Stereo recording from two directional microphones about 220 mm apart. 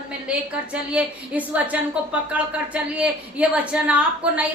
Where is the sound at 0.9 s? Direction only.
5° right (ahead or behind).